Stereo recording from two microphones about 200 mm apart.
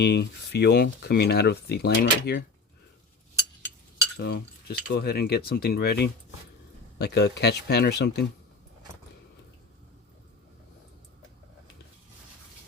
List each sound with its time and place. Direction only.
0.0 s speech: 55° left (ahead or behind)
4.2 s speech: 50° left (ahead or behind)